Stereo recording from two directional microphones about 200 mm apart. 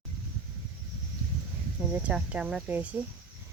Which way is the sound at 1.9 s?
5° right (ahead or behind).